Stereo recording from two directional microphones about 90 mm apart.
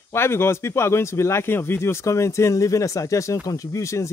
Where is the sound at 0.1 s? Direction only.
25° left (ahead or behind).